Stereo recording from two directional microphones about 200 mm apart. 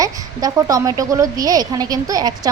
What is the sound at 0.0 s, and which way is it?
A woman's voice, 15° right (ahead or behind).